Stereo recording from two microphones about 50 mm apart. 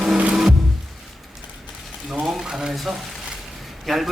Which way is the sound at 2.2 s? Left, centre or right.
Centre.